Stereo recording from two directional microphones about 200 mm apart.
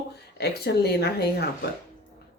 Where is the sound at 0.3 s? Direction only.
55° left (ahead or behind).